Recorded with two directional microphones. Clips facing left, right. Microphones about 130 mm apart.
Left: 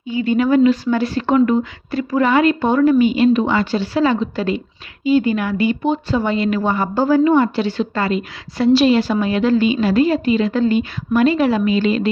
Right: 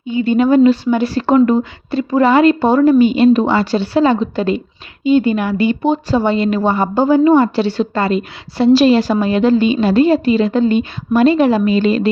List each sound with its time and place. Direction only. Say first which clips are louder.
0.1 s a woman's voice: right 3 dB; 25° right (ahead or behind)
7.3 s a woman's voice: right 4 dB; 35° right (ahead or behind)
8.7 s a woman's voice: right 3 dB; 40° right (ahead or behind)